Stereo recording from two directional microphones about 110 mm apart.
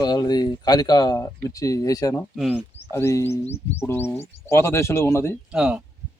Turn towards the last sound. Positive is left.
turn(degrees=-5)  # may be behind; listen again after turning